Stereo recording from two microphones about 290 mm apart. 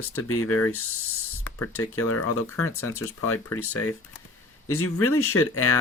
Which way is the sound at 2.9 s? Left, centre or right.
Left.